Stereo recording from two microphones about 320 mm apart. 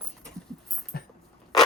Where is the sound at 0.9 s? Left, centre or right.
Left.